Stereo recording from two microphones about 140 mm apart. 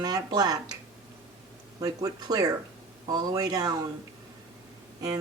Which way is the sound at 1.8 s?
25° right (ahead or behind).